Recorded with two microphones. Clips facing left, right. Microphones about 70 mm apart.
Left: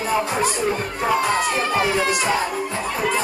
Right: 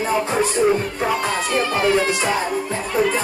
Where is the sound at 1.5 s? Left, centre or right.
Centre.